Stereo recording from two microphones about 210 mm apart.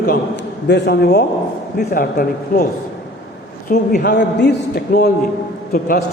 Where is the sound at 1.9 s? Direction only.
40° left (ahead or behind).